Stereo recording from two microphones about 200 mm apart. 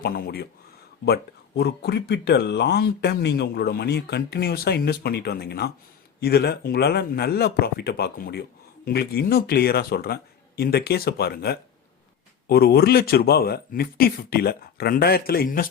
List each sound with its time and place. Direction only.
0.0 s speech: 50° left (ahead or behind)